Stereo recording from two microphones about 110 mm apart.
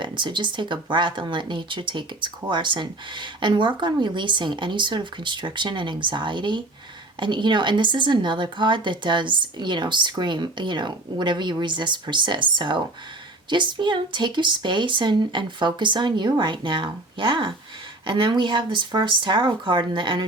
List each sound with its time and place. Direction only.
0.0 s speech: 45° right (ahead or behind)